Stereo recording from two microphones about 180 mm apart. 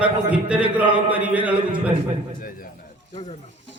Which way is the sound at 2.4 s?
50° left (ahead or behind).